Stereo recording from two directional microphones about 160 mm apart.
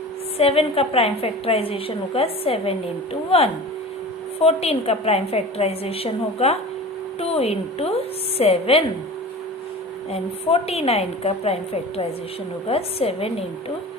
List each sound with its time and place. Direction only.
0.3 s a woman's voice: 40° left (ahead or behind)
4.4 s a woman's voice: 40° left (ahead or behind)
10.1 s a woman's voice: 40° left (ahead or behind)